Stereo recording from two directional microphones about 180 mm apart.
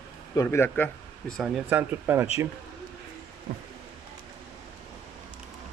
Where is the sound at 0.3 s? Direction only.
15° left (ahead or behind).